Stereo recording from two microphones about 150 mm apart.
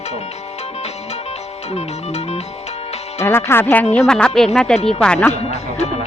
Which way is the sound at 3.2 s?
20° left (ahead or behind).